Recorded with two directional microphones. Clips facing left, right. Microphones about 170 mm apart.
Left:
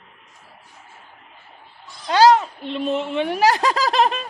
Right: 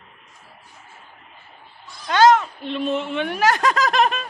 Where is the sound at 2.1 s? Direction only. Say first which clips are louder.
Left 1 dB; 30° left (ahead or behind).